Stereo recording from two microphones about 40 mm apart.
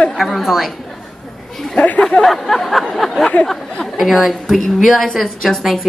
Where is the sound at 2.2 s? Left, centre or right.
Centre.